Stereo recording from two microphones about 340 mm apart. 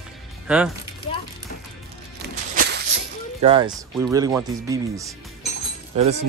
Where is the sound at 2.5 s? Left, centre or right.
Right.